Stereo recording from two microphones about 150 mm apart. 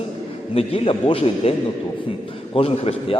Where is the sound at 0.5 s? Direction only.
40° left (ahead or behind).